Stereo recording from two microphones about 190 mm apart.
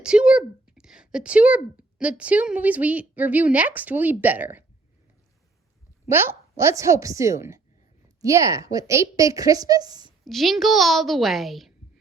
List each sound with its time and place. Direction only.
0.0 s speech: 5° right (ahead or behind)
6.1 s speech: 10° right (ahead or behind)
10.2 s a woman's voice: centre (ahead or behind)